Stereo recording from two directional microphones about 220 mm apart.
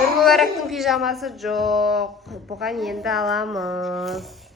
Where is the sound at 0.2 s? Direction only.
Centre (ahead or behind).